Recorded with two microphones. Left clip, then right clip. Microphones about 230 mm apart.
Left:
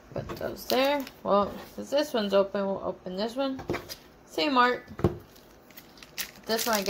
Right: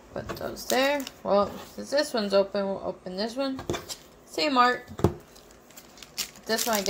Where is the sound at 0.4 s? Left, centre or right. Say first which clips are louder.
Right 1 dB; centre.